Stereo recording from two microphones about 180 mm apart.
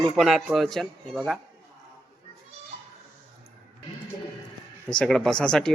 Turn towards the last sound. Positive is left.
turn(degrees=5)  # may be behind; listen again after turning